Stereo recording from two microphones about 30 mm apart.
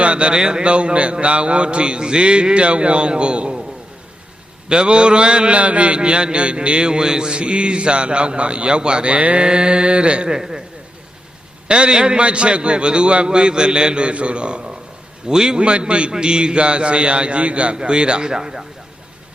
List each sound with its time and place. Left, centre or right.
0.0 s speech: right
0.3 s speech: right
0.6 s mantra: right
4.7 s mantra: right
9.1 s mantra: right
9.4 s mantra: right
10.2 s speech: right
11.7 s mantra: right
15.3 s speech: right
15.6 s mantra: right
17.7 s speech: right